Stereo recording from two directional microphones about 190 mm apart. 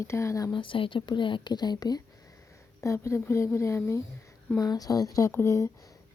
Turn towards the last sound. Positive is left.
turn(degrees=20)  # may be behind; listen again after turning